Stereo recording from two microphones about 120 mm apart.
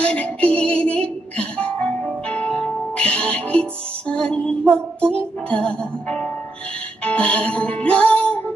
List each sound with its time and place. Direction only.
0.0 s a sound: 10° left (ahead or behind)
1.6 s music: 10° left (ahead or behind)
7.1 s music: 10° left (ahead or behind)